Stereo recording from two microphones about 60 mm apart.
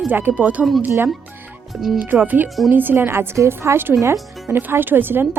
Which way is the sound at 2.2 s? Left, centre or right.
Right.